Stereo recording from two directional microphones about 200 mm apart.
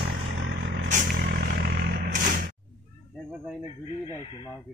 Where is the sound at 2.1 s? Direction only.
40° right (ahead or behind).